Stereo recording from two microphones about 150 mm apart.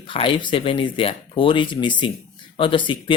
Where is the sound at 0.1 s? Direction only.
35° left (ahead or behind).